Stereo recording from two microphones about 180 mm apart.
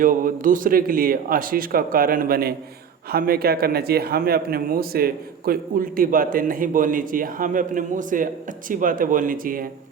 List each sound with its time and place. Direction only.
0.0 s a man's voice: 50° right (ahead or behind)